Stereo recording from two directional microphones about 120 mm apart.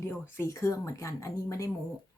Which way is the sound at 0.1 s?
20° left (ahead or behind).